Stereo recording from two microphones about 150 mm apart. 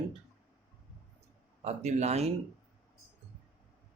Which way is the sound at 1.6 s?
45° right (ahead or behind).